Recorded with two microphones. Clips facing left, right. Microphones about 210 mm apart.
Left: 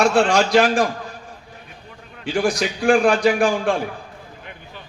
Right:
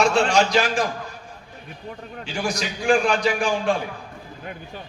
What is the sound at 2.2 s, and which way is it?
A man's voice, 55° left (ahead or behind).